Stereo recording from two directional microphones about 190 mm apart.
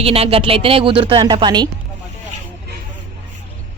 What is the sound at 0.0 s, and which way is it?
A woman's voice, 30° right (ahead or behind).